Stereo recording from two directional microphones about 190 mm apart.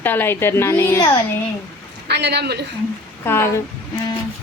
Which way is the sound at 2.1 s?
60° right (ahead or behind).